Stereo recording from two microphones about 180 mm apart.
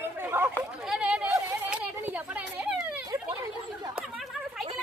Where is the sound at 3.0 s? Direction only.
20° right (ahead or behind).